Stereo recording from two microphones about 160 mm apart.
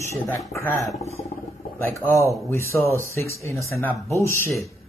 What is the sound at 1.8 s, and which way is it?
Speech, 10° left (ahead or behind).